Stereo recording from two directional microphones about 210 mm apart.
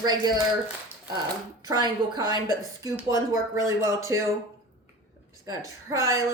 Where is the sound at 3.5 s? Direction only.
15° right (ahead or behind).